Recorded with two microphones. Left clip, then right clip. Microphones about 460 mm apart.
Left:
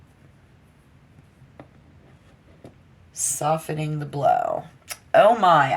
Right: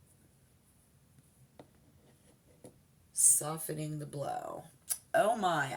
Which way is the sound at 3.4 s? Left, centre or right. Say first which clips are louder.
Left 15 dB; centre.